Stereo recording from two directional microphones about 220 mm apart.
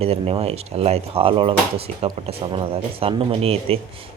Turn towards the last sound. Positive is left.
turn(degrees=-25)  # may be behind; listen again after turning